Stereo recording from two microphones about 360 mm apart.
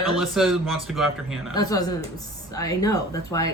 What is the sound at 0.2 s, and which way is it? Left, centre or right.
Speech, centre.